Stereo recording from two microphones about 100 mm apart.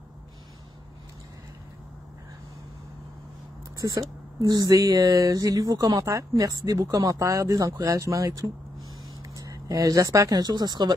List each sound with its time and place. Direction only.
3.7 s speech: 35° right (ahead or behind)